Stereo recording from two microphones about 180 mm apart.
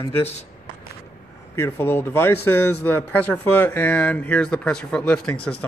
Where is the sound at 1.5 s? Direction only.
15° left (ahead or behind).